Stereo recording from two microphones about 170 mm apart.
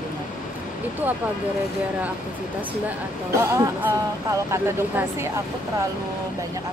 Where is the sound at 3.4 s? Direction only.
15° right (ahead or behind).